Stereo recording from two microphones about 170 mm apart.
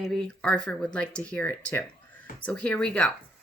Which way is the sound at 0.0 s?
5° left (ahead or behind).